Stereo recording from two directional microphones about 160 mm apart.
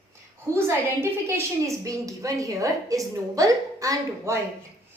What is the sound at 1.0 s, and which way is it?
A woman's voice, 15° right (ahead or behind).